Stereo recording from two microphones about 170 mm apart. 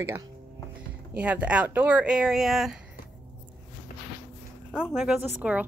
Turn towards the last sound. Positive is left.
turn(degrees=-5)  # may be behind; listen again after turning